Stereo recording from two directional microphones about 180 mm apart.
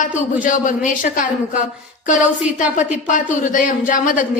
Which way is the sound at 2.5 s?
5° right (ahead or behind).